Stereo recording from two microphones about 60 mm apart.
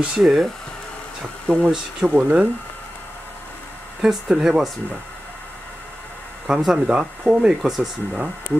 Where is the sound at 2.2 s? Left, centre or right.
Right.